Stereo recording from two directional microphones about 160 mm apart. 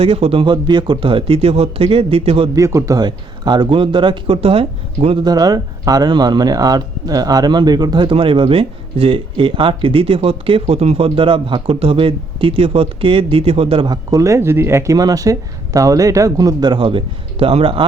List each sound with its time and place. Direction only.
0.0 s speech: 35° right (ahead or behind)
2.6 s speech: 20° right (ahead or behind); by 5.1 s 35° right (ahead or behind)
5.2 s speech: 25° right (ahead or behind)